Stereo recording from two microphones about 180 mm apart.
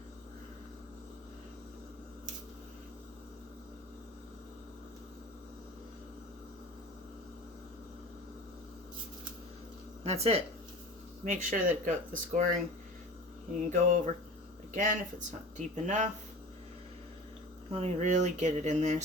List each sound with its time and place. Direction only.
10.0 s speech: 35° right (ahead or behind)
13.7 s speech: 45° right (ahead or behind)
17.7 s speech: 35° right (ahead or behind)